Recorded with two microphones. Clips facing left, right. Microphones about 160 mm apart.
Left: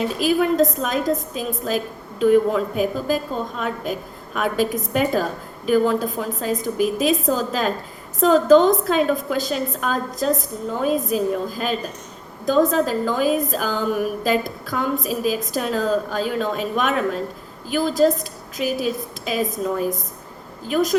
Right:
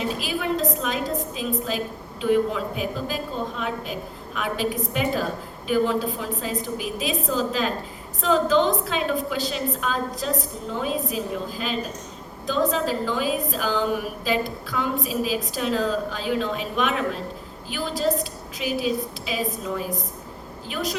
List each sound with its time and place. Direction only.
0.2 s a woman's voice: 45° left (ahead or behind)
4.4 s a woman's voice: 45° left (ahead or behind)